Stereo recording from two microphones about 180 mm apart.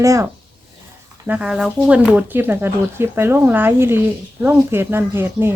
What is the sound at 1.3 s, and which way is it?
A woman's voice, 5° right (ahead or behind).